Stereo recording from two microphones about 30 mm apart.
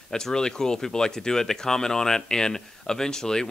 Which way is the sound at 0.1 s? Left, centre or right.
Left.